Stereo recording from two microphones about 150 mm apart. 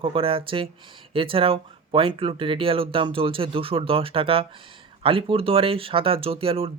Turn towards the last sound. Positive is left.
turn(degrees=-40)  # may be behind; listen again after turning